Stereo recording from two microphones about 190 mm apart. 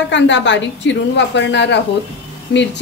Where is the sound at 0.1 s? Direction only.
70° left (ahead or behind).